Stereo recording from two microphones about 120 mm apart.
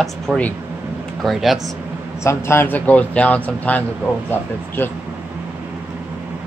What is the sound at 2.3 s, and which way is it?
Speech, 20° left (ahead or behind).